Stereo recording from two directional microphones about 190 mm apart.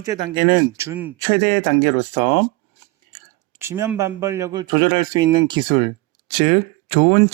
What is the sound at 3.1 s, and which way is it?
Speech, 15° right (ahead or behind).